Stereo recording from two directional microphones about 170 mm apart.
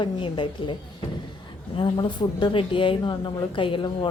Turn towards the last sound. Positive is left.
turn(degrees=30)  # may be behind; listen again after turning